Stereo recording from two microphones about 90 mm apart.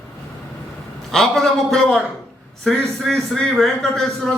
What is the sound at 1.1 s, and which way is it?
A man's voice, 5° left (ahead or behind).